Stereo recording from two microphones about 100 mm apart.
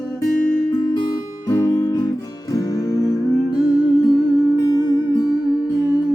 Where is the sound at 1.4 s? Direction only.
30° left (ahead or behind).